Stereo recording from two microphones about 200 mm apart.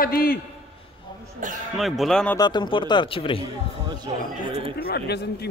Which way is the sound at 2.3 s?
20° left (ahead or behind).